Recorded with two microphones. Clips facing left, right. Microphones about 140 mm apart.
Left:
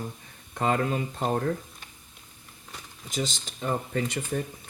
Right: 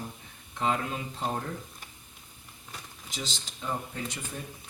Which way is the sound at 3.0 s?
50° left (ahead or behind).